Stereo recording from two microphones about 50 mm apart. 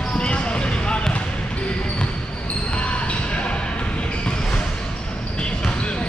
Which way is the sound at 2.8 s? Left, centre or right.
Left.